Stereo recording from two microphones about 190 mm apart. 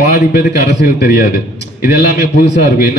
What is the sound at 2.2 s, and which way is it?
Speech, 55° left (ahead or behind).